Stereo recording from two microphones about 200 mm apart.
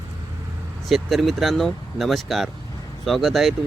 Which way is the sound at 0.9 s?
Centre (ahead or behind).